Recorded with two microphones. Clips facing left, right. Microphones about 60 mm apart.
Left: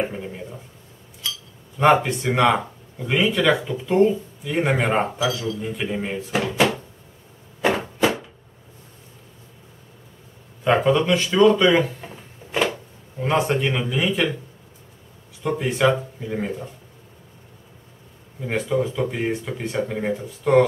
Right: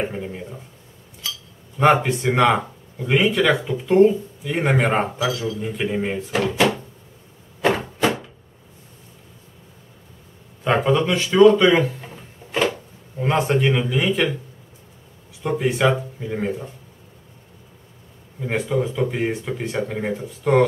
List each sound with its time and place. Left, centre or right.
0.0 s speech: centre
2.0 s speech: centre
6.1 s speech: centre
7.6 s a sound: centre
10.6 s speech: centre
15.4 s speech: centre
18.4 s speech: centre